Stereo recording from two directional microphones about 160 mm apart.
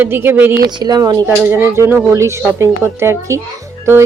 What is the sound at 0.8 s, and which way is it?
Speech, 25° right (ahead or behind).